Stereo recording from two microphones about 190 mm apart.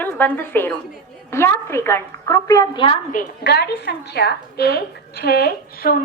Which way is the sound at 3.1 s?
50° left (ahead or behind).